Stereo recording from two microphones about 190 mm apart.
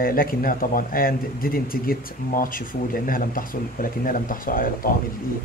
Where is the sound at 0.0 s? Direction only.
50° left (ahead or behind).